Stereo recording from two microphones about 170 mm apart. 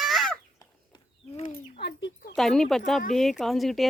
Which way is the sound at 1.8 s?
85° left.